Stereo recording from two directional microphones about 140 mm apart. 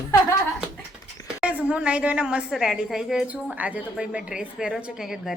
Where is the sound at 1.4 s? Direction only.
10° right (ahead or behind).